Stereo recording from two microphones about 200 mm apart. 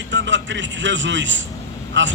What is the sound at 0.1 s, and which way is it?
A man's voice, 65° right (ahead or behind).